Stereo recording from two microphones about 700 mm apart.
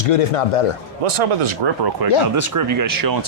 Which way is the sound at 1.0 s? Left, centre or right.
Right.